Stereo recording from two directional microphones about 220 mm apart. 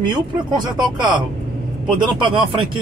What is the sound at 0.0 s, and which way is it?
Speech, 20° right (ahead or behind).